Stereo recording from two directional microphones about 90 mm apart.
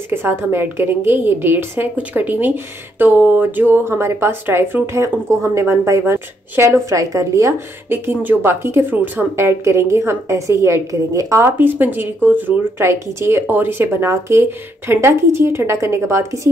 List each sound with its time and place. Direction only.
0.1 s a woman's voice: 25° right (ahead or behind)
7.9 s a woman's voice: 25° right (ahead or behind)